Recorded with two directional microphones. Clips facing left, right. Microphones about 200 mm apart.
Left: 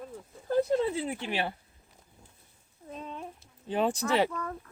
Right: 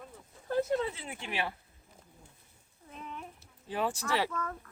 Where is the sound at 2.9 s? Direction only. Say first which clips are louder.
Left 4 dB; 30° left (ahead or behind).